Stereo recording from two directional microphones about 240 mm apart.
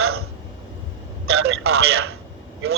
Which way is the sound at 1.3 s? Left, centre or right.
Right.